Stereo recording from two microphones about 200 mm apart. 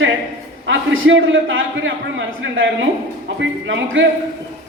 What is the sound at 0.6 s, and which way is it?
A man's voice, 75° right (ahead or behind).